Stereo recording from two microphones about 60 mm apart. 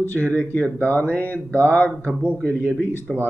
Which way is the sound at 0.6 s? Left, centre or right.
Left.